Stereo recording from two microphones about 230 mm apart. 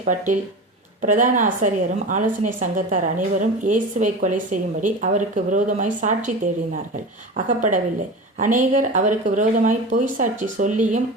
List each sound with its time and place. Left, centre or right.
0.0 s a woman's voice: right